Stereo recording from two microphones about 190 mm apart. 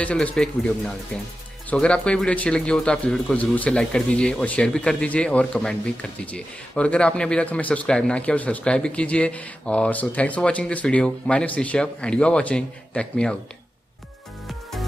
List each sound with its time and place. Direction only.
0.0 s speech: 5° left (ahead or behind)
14.5 s music: centre (ahead or behind)